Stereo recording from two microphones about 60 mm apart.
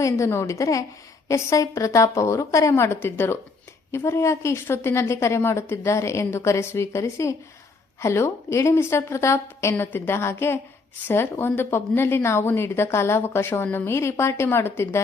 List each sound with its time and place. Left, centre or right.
0.0 s a woman's voice: left
0.5 s a woman's voice: left
2.7 s a woman's voice: left